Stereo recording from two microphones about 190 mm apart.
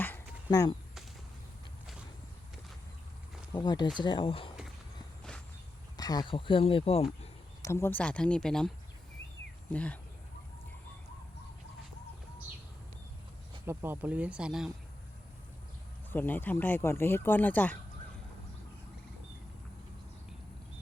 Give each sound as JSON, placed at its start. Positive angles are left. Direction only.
{"t": 0.0, "sound": "a sound", "side_deg": 15}
{"t": 3.5, "sound": "speech", "side_deg": 20}
{"t": 6.0, "sound": "speech", "side_deg": 20}
{"t": 7.6, "sound": "speech", "side_deg": 15}
{"t": 9.7, "sound": "speech", "side_deg": 5}
{"t": 13.7, "sound": "speech", "side_deg": -10}
{"t": 16.0, "sound": "speech", "side_deg": 10}